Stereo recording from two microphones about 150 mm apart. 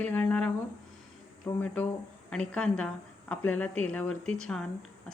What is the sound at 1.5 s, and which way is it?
Speech, 15° left (ahead or behind).